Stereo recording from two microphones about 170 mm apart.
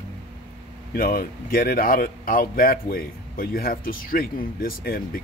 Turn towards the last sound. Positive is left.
turn(degrees=60)  # may be behind; listen again after turning